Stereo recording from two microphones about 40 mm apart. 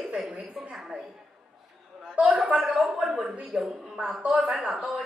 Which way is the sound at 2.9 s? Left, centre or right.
Centre.